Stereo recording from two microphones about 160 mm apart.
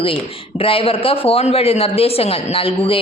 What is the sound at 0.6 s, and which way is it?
A woman's voice, 35° left (ahead or behind).